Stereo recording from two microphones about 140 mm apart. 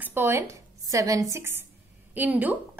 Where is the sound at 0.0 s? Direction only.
15° right (ahead or behind).